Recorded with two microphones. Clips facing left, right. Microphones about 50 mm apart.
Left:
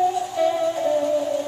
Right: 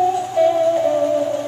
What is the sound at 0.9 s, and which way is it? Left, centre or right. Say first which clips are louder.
Music: right 3 dB; right.